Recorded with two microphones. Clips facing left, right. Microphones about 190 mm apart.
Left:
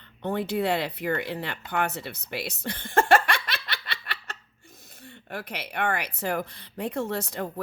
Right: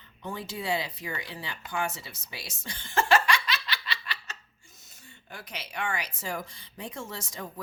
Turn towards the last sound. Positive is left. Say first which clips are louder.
# left 9 dB
turn(degrees=60)  # may be behind; listen again after turning